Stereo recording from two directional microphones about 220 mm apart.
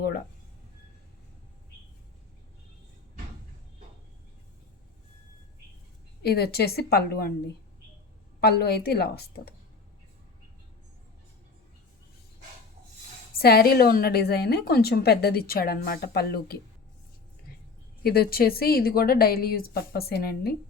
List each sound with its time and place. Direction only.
6.2 s a woman's voice: 45° left (ahead or behind)
13.4 s a woman's voice: 45° left (ahead or behind)
18.0 s a woman's voice: 45° left (ahead or behind)